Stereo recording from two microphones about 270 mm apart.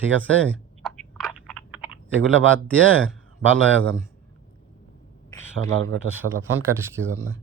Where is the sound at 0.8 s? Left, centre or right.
Centre.